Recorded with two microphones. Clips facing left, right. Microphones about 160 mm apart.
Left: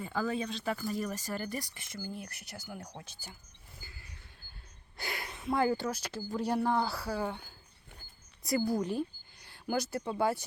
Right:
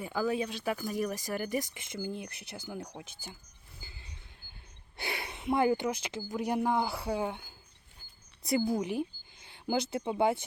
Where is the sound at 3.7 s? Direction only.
25° right (ahead or behind).